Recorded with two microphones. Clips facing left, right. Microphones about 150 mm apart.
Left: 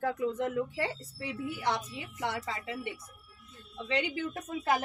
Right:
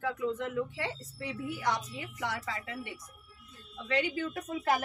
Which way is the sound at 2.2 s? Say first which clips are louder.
Left 2 dB; 25° left (ahead or behind).